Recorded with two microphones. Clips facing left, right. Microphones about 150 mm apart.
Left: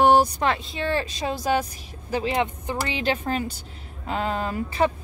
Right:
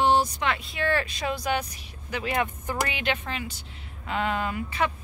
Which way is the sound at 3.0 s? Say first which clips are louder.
Left 5 dB; 40° left (ahead or behind).